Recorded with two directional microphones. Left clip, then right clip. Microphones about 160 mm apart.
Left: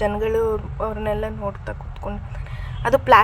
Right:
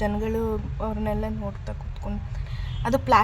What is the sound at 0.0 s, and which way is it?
A woman's voice, 15° left (ahead or behind).